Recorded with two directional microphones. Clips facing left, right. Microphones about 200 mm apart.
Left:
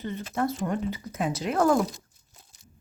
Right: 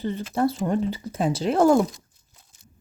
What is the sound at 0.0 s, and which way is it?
Speech, 30° right (ahead or behind).